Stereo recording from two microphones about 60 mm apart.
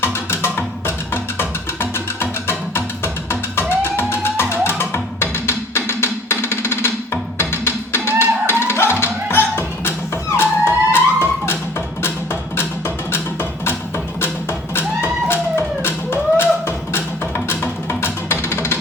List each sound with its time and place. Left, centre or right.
0.0 s music: left
14.8 s music: left